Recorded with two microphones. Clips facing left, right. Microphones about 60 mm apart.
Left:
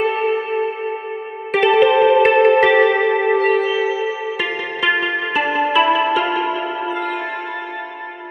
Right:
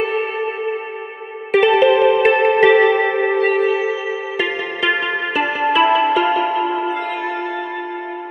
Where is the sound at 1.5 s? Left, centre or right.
Centre.